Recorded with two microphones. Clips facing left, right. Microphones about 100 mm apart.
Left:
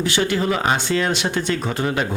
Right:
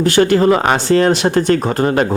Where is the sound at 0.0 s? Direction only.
50° right (ahead or behind).